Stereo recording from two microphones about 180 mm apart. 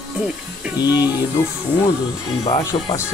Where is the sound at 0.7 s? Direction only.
20° left (ahead or behind).